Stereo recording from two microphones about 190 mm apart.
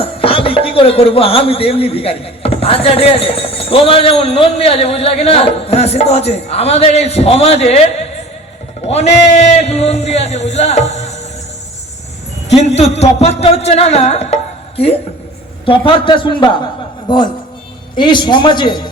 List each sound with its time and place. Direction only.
0.0 s speech: 30° left (ahead or behind)
8.9 s speech: 35° left (ahead or behind)
12.5 s speech: 35° left (ahead or behind)
15.6 s a man's voice: 25° left (ahead or behind)